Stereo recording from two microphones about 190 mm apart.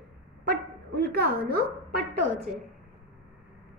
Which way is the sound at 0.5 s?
60° right (ahead or behind).